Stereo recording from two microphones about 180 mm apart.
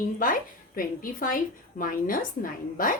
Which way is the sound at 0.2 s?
50° left (ahead or behind).